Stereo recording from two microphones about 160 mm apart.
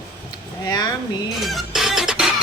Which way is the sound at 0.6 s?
25° left (ahead or behind).